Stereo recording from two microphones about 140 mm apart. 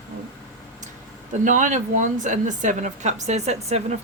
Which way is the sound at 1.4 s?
65° right (ahead or behind).